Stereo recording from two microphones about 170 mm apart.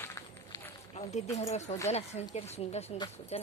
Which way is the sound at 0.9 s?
40° left (ahead or behind).